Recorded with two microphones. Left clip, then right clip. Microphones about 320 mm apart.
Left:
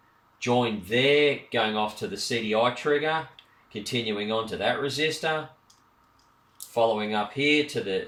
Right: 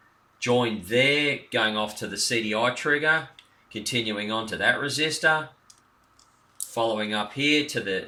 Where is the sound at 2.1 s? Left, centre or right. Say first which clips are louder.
Even; centre.